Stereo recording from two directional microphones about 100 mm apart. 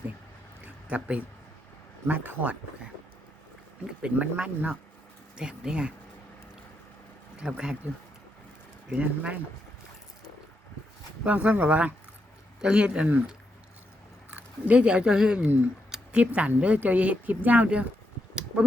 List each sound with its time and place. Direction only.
0.6 s a sound: 15° right (ahead or behind)
2.0 s speech: 15° right (ahead or behind)
4.0 s speech: 10° right (ahead or behind)
7.3 s speech: 10° right (ahead or behind)
9.0 s speech: 15° right (ahead or behind)
11.2 s speech: 10° right (ahead or behind)
15.4 s speech: 20° right (ahead or behind)